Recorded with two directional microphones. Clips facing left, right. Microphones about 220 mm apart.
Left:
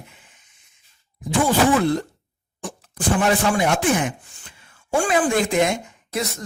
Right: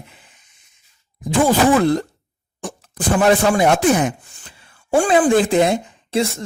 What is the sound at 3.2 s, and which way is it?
Speech, 35° right (ahead or behind).